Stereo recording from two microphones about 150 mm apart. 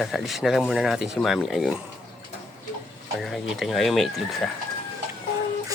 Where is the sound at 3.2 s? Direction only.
Centre (ahead or behind).